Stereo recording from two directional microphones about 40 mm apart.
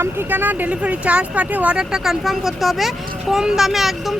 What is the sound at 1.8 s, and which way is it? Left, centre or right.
Speech, centre.